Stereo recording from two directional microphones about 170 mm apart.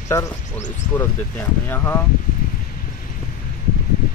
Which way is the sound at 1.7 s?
15° left (ahead or behind).